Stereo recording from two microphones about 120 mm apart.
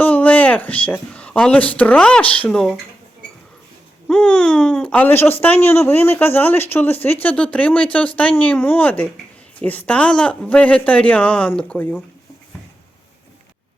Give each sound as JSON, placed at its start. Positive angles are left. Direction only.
{"t": 0.0, "sound": "speech", "side_deg": 15}
{"t": 4.1, "sound": "speech", "side_deg": 10}